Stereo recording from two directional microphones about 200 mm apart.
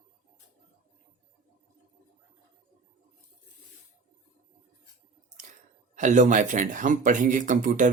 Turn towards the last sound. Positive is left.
turn(degrees=-40)  # may be behind; listen again after turning